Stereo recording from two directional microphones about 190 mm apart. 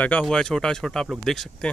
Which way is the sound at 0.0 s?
5° left (ahead or behind).